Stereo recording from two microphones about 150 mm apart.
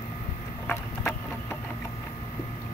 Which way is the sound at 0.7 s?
15° left (ahead or behind).